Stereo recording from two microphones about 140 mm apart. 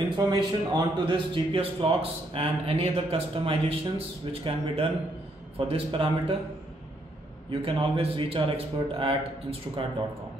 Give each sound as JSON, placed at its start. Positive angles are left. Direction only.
{"t": 0.2, "sound": "a man's voice", "side_deg": -30}
{"t": 7.6, "sound": "a man's voice", "side_deg": -40}